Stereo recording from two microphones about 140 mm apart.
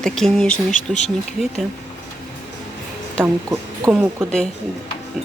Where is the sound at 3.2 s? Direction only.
20° right (ahead or behind).